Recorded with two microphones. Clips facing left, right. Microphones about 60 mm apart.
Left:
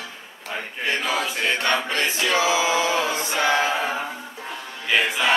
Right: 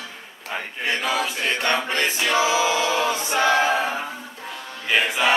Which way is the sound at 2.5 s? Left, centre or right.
Left.